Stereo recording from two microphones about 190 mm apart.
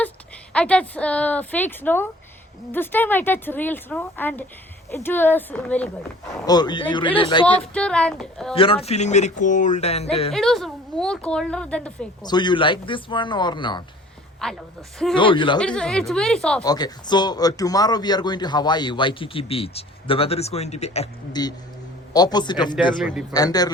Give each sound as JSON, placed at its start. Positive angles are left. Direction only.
{"t": 0.5, "sound": "a woman's voice", "side_deg": 5}
{"t": 6.4, "sound": "a man's voice", "side_deg": 20}
{"t": 7.7, "sound": "a woman's voice", "side_deg": 5}
{"t": 8.5, "sound": "speech", "side_deg": 30}
{"t": 10.3, "sound": "a woman's voice", "side_deg": 0}
{"t": 12.2, "sound": "a man's voice", "side_deg": 20}
{"t": 14.4, "sound": "a woman's voice", "side_deg": 5}
{"t": 15.1, "sound": "a man's voice", "side_deg": 25}
{"t": 15.5, "sound": "a woman's voice", "side_deg": 5}
{"t": 16.6, "sound": "a man's voice", "side_deg": 20}
{"t": 21.4, "sound": "a man's voice", "side_deg": 20}